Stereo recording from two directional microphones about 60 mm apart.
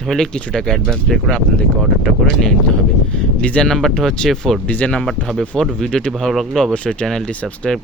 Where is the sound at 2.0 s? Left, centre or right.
Centre.